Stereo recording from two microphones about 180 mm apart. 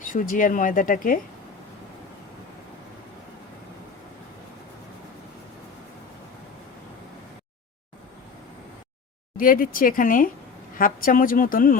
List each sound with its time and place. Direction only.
0.1 s speech: 50° left (ahead or behind)
9.4 s speech: 50° left (ahead or behind)